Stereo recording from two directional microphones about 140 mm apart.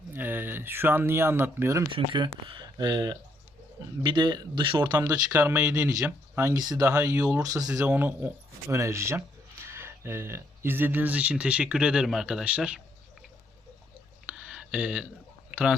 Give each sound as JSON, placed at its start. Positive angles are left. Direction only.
{"t": 0.1, "sound": "speech", "side_deg": -15}
{"t": 1.9, "sound": "speech", "side_deg": -35}
{"t": 5.4, "sound": "speech", "side_deg": -20}
{"t": 14.3, "sound": "a sound", "side_deg": -10}